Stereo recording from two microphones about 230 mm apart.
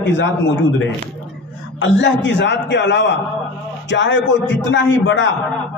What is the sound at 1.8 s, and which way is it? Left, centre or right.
A man's voice, left.